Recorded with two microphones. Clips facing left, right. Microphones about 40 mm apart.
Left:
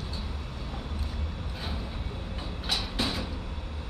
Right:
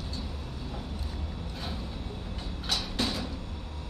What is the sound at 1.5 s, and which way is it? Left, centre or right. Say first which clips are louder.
Vehicle: left 1 dB; centre.